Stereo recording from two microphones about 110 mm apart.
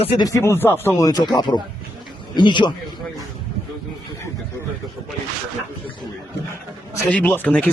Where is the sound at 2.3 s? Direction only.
45° left (ahead or behind).